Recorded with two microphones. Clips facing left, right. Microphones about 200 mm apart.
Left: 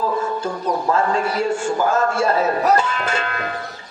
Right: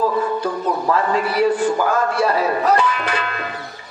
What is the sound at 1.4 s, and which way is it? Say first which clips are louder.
Speech: right 3 dB; 25° left (ahead or behind).